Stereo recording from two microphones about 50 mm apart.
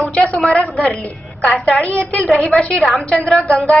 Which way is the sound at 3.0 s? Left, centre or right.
Left.